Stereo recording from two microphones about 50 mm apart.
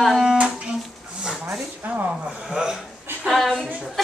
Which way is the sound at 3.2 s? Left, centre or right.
Centre.